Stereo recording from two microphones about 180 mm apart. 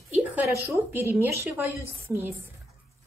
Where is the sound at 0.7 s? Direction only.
15° right (ahead or behind).